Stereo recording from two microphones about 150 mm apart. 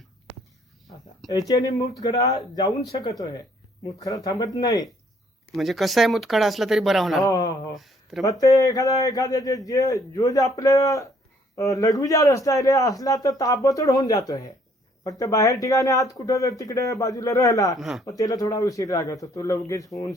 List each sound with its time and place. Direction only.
1.3 s a man's voice: 25° left (ahead or behind)
5.5 s speech: centre (ahead or behind)
7.3 s a man's voice: 25° left (ahead or behind)
7.8 s speech: centre (ahead or behind)
8.2 s a man's voice: 20° left (ahead or behind)
17.7 s speech: centre (ahead or behind)
18.0 s a man's voice: 25° left (ahead or behind)